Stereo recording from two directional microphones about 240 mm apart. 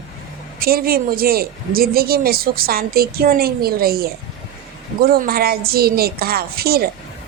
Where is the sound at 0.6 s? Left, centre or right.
Right.